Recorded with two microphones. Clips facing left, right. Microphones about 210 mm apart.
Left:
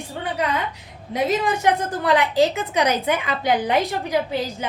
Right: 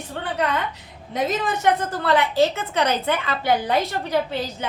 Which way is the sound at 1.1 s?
10° left (ahead or behind).